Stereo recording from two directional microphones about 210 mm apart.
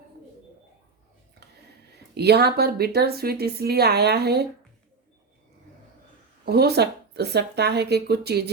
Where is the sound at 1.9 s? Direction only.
50° right (ahead or behind).